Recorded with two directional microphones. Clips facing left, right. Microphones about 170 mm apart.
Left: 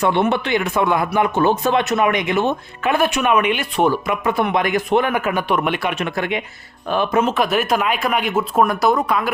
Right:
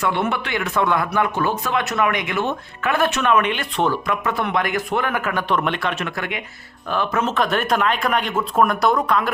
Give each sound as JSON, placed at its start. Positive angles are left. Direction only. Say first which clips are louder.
{"t": 0.0, "sound": "speech", "louder": "left 5 dB", "side_deg": 25}